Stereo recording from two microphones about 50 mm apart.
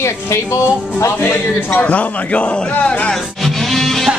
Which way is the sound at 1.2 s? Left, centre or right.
Left.